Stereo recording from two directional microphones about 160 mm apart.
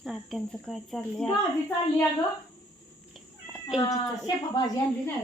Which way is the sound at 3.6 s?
30° left (ahead or behind).